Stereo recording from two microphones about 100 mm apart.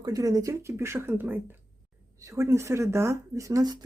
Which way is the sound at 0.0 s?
35° right (ahead or behind).